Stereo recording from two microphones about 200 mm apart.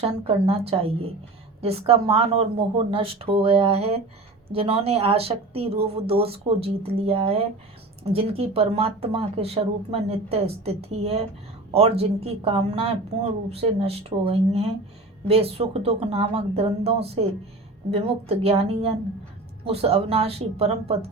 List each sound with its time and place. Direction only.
0.0 s speech: 30° right (ahead or behind)